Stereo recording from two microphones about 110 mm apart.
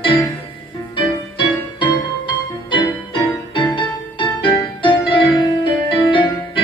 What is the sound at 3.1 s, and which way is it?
Music, 45° left (ahead or behind).